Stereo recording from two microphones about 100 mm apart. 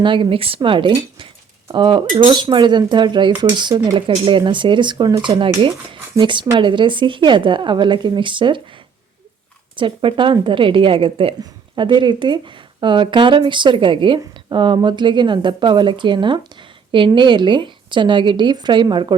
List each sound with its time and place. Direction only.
0.0 s speech: 55° right (ahead or behind)
3.9 s speech: 60° right (ahead or behind); by 5.3 s 45° right (ahead or behind)
5.3 s speech: 60° right (ahead or behind)
9.7 s speech: 60° right (ahead or behind)
11.8 s speech: 50° right (ahead or behind)